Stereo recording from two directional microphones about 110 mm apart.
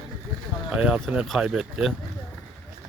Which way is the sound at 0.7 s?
10° right (ahead or behind).